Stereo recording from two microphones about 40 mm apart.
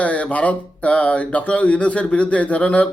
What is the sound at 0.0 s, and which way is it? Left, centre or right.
A man's voice, left.